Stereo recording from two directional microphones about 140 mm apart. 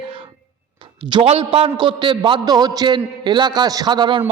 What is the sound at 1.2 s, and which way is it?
A man's voice, 40° right (ahead or behind).